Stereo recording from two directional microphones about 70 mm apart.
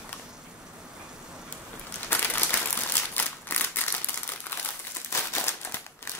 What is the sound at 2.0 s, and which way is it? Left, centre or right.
Crushing, left.